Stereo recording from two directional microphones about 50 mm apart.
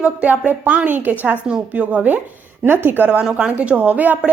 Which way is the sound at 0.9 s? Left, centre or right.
Right.